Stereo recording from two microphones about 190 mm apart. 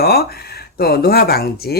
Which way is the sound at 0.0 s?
55° left (ahead or behind).